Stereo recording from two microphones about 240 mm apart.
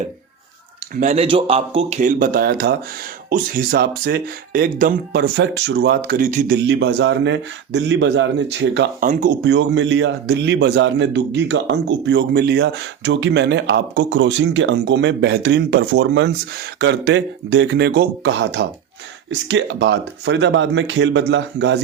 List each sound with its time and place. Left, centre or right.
0.9 s a man's voice: right
9.0 s speech: right
9.4 s a man's voice: right